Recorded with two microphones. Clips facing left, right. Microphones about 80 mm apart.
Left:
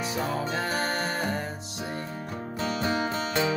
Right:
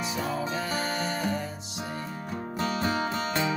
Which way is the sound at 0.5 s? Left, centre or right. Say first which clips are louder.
Left 2 dB; left.